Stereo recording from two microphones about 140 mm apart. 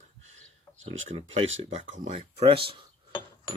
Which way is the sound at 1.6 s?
55° right (ahead or behind).